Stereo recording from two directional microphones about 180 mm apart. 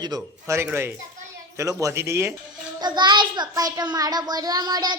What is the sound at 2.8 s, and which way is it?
A child's voice, 25° right (ahead or behind).